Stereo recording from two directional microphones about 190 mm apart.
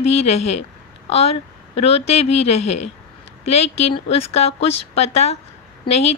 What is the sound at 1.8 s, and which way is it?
A woman's voice, 35° left (ahead or behind).